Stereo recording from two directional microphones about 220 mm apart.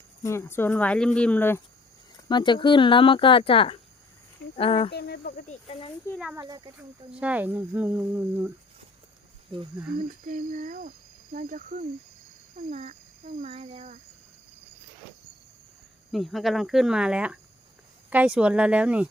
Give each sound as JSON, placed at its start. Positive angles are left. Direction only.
{"t": 0.2, "sound": "speech", "side_deg": 10}
{"t": 2.3, "sound": "speech", "side_deg": 20}
{"t": 4.9, "sound": "speech", "side_deg": 45}
{"t": 5.5, "sound": "speech", "side_deg": 25}
{"t": 6.3, "sound": "speech", "side_deg": -15}
{"t": 7.1, "sound": "speech", "side_deg": -5}
{"t": 9.5, "sound": "speech", "side_deg": -20}
{"t": 10.2, "sound": "speech", "side_deg": -35}
{"t": 16.1, "sound": "speech", "side_deg": 0}